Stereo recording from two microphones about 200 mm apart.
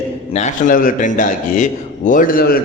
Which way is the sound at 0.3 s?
40° left (ahead or behind).